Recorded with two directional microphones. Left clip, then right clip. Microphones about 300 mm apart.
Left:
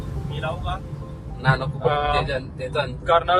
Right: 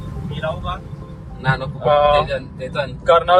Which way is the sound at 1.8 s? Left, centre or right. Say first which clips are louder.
Right 9 dB; centre.